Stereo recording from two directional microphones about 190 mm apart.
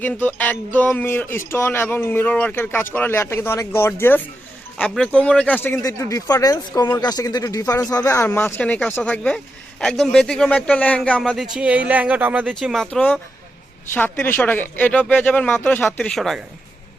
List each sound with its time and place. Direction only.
0.0 s speech: 10° left (ahead or behind)